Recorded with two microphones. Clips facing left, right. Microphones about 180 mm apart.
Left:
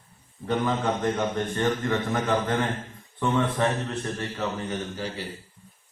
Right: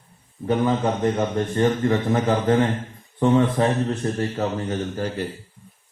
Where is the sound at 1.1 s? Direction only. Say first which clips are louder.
Right 4 dB; 30° right (ahead or behind).